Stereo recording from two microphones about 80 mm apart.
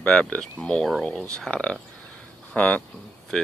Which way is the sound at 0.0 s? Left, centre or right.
Centre.